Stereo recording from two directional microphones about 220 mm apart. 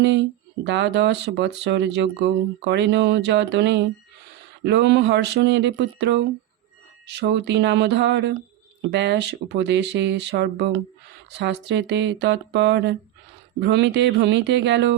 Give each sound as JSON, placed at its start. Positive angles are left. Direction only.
{"t": 0.0, "sound": "speech", "side_deg": -55}